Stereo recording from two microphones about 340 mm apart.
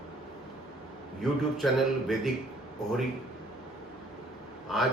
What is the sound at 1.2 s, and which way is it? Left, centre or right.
Speech, centre.